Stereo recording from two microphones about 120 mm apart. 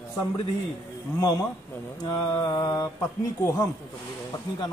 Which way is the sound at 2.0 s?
30° left (ahead or behind).